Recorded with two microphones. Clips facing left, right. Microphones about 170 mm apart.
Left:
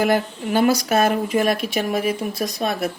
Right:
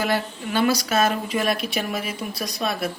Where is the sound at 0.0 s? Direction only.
50° left (ahead or behind).